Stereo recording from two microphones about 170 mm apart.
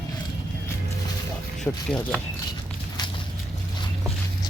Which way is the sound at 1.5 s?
5° left (ahead or behind).